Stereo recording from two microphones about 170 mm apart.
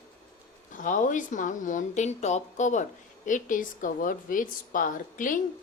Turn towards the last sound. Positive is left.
turn(degrees=50)  # may be behind; listen again after turning